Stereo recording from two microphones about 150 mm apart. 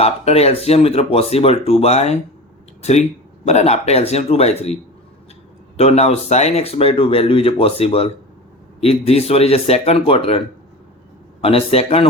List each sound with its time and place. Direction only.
0.0 s speech: 45° left (ahead or behind)
3.4 s speech: 45° left (ahead or behind)